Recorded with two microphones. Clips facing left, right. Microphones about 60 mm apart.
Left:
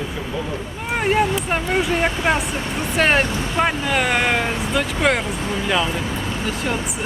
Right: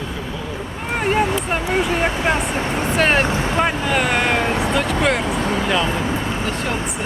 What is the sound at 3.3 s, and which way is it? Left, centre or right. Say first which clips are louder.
Speech: right 3 dB; right.